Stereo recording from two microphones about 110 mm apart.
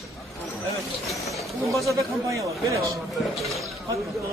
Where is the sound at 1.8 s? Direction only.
30° right (ahead or behind).